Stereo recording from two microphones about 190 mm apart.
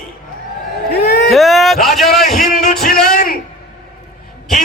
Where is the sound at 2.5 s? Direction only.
40° left (ahead or behind).